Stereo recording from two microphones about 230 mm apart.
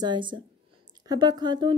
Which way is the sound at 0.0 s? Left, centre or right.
Centre.